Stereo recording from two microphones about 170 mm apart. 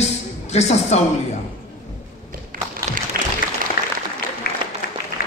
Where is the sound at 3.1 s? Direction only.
60° right (ahead or behind).